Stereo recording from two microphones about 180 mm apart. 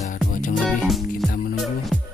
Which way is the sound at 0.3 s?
45° left (ahead or behind).